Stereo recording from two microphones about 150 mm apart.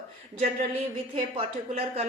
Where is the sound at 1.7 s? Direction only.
45° right (ahead or behind).